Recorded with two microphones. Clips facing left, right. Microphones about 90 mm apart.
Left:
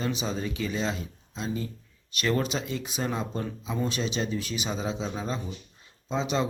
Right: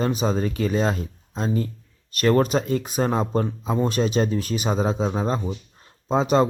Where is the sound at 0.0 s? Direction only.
45° right (ahead or behind).